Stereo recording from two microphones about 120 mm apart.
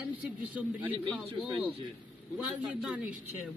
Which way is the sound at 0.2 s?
10° right (ahead or behind).